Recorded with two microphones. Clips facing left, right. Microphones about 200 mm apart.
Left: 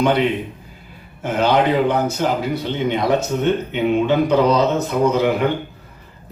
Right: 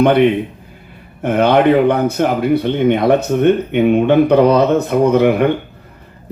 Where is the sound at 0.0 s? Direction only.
60° right (ahead or behind).